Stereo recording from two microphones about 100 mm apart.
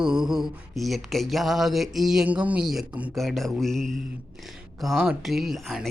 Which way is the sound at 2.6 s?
5° right (ahead or behind).